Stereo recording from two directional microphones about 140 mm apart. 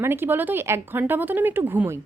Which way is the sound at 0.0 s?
15° right (ahead or behind).